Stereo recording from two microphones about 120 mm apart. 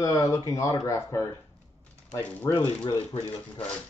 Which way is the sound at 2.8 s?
50° left (ahead or behind).